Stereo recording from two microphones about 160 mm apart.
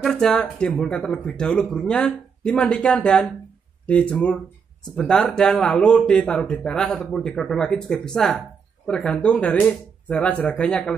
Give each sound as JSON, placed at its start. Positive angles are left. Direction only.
{"t": 0.0, "sound": "speech", "side_deg": 5}